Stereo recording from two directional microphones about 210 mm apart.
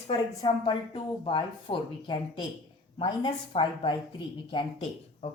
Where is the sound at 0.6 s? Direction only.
25° left (ahead or behind).